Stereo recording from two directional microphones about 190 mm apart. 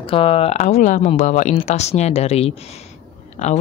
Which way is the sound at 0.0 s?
30° left (ahead or behind).